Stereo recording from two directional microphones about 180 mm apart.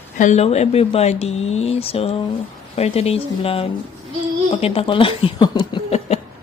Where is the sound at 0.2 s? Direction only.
40° left (ahead or behind).